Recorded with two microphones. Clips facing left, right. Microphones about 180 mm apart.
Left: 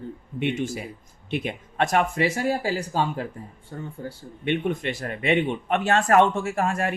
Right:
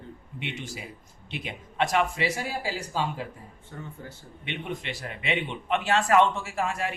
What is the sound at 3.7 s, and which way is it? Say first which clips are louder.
Speech: left 5 dB; 40° left (ahead or behind).